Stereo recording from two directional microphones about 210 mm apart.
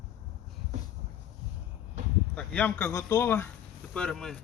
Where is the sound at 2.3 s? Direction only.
10° left (ahead or behind).